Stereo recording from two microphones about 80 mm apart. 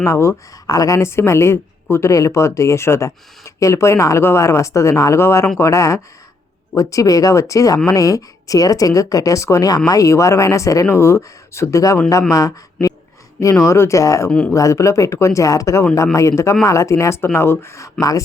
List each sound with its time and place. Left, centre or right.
0.0 s speech: left
0.7 s speech: left
14.3 s speech: centre
14.5 s speech: left